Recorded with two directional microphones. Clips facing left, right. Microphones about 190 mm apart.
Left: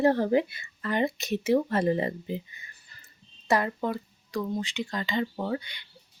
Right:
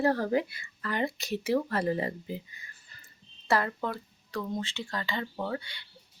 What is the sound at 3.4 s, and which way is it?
Speech, 15° left (ahead or behind).